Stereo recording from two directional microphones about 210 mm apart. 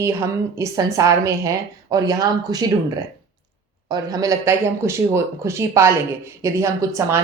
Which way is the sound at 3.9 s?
15° right (ahead or behind).